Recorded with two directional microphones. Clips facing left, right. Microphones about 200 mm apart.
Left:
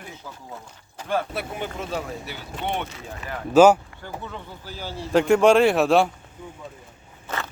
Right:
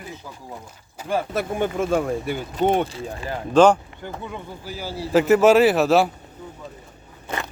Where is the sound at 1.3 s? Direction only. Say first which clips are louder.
Right 7 dB; 45° right (ahead or behind); by 3.4 s 30° right (ahead or behind).